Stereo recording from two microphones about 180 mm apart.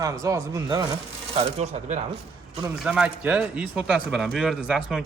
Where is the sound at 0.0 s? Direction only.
20° right (ahead or behind).